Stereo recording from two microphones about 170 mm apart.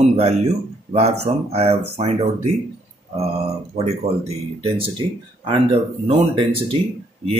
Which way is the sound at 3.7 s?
40° right (ahead or behind).